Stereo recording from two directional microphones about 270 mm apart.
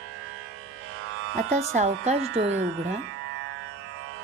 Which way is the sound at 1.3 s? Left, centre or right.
Right.